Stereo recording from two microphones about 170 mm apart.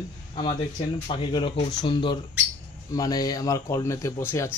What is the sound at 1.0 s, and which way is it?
Speech, 30° left (ahead or behind).